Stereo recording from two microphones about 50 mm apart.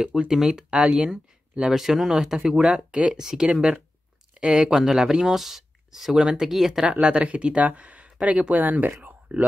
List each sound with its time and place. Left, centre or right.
0.1 s speech: centre
3.2 s speech: centre
6.9 s speech: right
9.0 s a sound: right